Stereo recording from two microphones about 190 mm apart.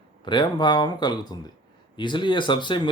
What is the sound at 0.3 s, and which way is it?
Speech, 25° left (ahead or behind).